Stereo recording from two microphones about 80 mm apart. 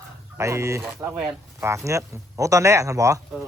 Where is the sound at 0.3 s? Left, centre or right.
Right.